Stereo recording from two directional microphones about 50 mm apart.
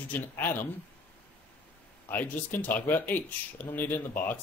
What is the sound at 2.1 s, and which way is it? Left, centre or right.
Speech, left.